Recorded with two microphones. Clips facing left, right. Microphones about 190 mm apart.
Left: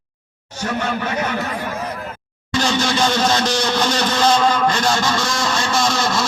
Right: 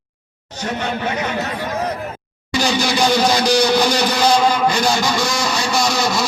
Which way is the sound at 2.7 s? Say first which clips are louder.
Right 1 dB; 15° right (ahead or behind).